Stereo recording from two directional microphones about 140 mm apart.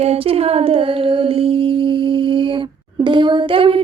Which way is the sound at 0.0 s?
45° right (ahead or behind).